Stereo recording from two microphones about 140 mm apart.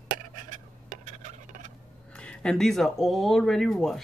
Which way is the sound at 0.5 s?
65° right (ahead or behind).